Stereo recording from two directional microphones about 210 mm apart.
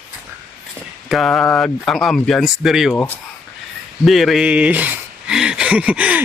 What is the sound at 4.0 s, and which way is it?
Speech, centre (ahead or behind).